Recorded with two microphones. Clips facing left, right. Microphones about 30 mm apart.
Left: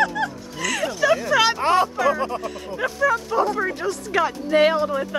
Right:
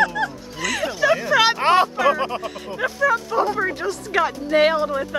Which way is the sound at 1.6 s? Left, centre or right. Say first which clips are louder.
Right 2 dB; right.